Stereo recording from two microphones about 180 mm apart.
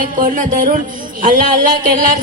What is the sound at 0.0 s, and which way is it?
Speech, 45° right (ahead or behind).